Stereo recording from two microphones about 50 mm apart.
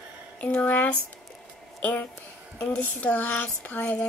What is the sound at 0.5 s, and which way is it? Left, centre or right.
Speech, left.